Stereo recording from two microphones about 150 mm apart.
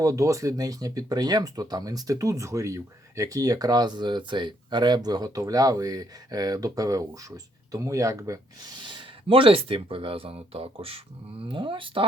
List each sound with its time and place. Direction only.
0.0 s speech: 20° right (ahead or behind)
8.8 s speech: 35° right (ahead or behind)